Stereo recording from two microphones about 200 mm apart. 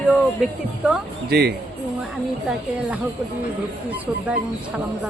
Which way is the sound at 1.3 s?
55° right (ahead or behind).